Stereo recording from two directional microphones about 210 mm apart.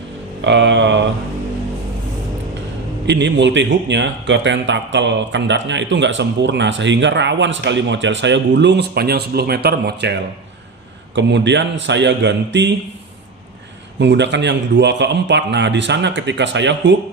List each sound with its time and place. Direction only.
0.4 s speech: 55° right (ahead or behind)
3.1 s speech: 55° right (ahead or behind)
14.0 s speech: 55° right (ahead or behind)